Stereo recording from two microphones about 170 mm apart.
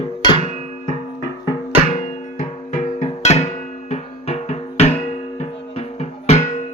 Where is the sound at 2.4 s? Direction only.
45° left (ahead or behind).